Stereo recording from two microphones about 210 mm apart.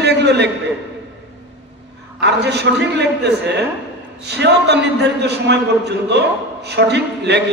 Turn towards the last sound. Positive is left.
turn(degrees=-55)  # may be behind; listen again after turning